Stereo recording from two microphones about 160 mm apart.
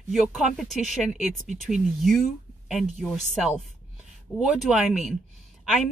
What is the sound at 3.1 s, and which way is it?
Speech, 45° left (ahead or behind).